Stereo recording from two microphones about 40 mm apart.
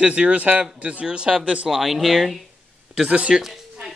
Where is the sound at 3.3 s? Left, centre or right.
Centre.